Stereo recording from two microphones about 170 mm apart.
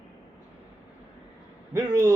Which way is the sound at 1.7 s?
20° right (ahead or behind).